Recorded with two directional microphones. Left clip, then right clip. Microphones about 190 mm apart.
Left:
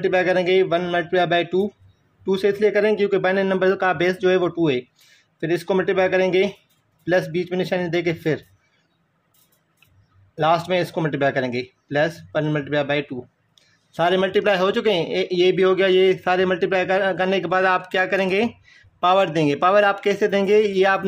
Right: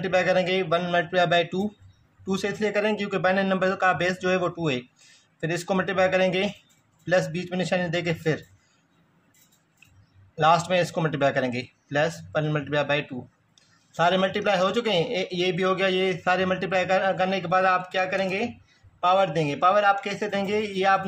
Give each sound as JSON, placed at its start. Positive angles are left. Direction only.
{"t": 0.0, "sound": "speech", "side_deg": 30}
{"t": 10.3, "sound": "a man's voice", "side_deg": 25}